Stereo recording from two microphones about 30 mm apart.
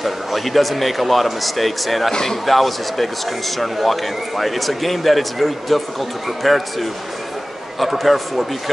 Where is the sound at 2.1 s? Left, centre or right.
Centre.